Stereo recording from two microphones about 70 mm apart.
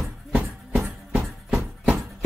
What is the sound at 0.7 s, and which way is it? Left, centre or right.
Music, centre.